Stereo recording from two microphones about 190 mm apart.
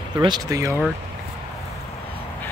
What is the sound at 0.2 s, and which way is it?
Speech, 20° right (ahead or behind).